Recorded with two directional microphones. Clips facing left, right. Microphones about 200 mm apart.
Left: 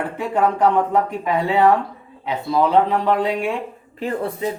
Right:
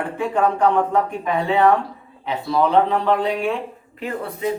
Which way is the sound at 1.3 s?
15° left (ahead or behind).